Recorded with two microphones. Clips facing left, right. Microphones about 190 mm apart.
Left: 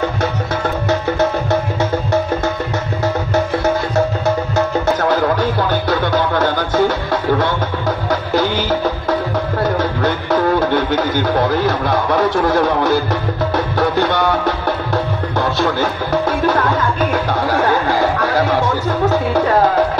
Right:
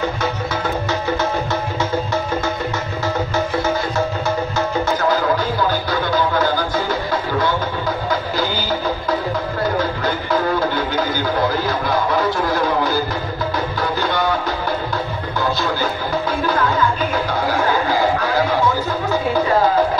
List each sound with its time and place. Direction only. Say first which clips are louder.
5.4 s music: left 3 dB; 75° left (ahead or behind)
13.7 s music: left 7 dB; 70° left (ahead or behind)
17.8 s music: left 2 dB; 70° left (ahead or behind)